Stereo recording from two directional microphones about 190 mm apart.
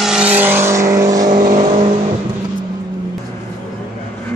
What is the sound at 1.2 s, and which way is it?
Vehicle, 40° right (ahead or behind).